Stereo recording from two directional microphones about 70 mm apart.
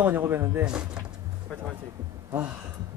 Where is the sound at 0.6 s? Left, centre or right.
Centre.